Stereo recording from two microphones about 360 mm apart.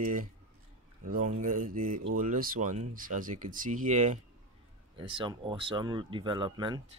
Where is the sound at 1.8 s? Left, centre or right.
Right.